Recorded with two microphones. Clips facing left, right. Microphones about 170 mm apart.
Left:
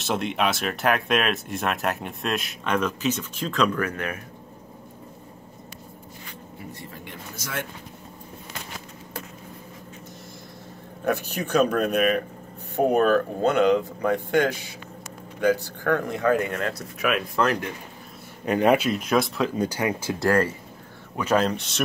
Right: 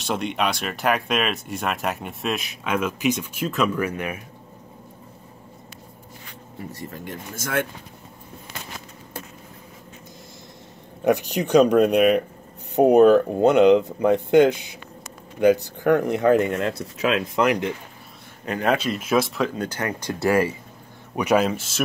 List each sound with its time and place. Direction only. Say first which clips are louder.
0.0 s speech: even; centre (ahead or behind)
6.7 s speech: right 8 dB; 45° right (ahead or behind)
11.1 s speech: right 6 dB; 15° right (ahead or behind)
18.4 s speech: left 3 dB; 10° left (ahead or behind)
18.9 s speech: right 1 dB; centre (ahead or behind)
19.5 s speech: left 2 dB; 10° left (ahead or behind)